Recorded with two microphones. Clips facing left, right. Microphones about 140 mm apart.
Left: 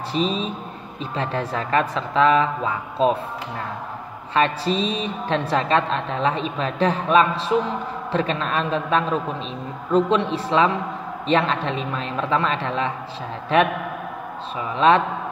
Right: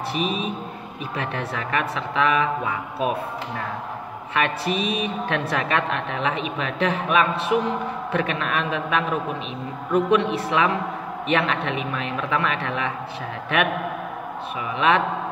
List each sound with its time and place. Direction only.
0.1 s speech: 30° left (ahead or behind)
4.3 s a woman's voice: 30° left (ahead or behind)
14.8 s speech: 35° left (ahead or behind)